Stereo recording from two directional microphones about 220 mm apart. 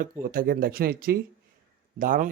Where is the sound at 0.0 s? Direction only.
40° right (ahead or behind).